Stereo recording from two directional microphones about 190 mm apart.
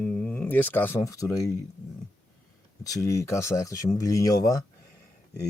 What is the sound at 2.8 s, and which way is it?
A man's voice, 20° left (ahead or behind).